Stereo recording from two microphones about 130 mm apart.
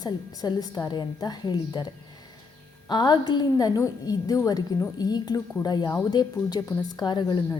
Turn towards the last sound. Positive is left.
turn(degrees=35)  # may be behind; listen again after turning